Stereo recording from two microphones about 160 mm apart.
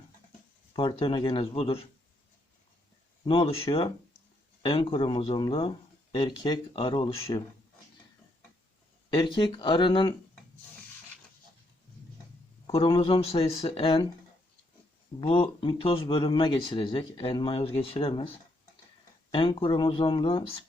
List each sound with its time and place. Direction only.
0.7 s speech: 30° left (ahead or behind)
3.2 s speech: 35° left (ahead or behind)
9.0 s speech: 30° left (ahead or behind)
12.6 s speech: 35° left (ahead or behind)
15.2 s speech: 35° left (ahead or behind)
19.3 s speech: 30° left (ahead or behind)